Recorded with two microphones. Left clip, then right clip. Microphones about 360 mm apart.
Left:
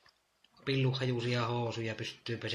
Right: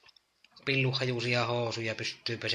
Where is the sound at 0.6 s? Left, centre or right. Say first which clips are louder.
Right 4 dB; centre.